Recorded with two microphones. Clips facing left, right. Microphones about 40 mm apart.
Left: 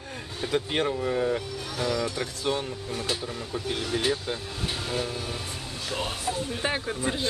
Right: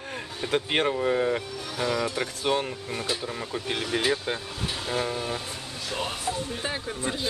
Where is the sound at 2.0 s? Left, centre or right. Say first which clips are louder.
Right 1 dB; right.